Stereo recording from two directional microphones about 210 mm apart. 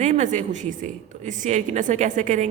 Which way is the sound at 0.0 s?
35° right (ahead or behind).